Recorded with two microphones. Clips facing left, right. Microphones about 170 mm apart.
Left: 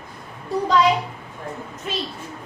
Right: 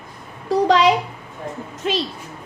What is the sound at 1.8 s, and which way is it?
Speech, 90° right.